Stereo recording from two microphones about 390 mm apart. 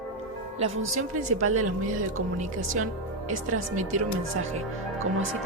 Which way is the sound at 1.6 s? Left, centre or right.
Right.